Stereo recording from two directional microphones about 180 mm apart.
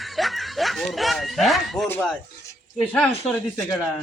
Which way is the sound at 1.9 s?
10° left (ahead or behind).